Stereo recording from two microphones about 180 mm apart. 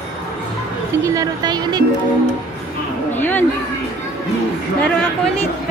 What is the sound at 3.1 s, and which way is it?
Speech, 10° left (ahead or behind).